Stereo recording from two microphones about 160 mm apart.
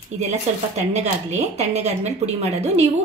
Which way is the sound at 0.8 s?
45° right (ahead or behind).